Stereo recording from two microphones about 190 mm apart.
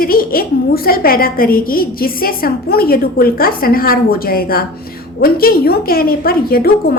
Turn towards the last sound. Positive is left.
turn(degrees=50)  # may be behind; listen again after turning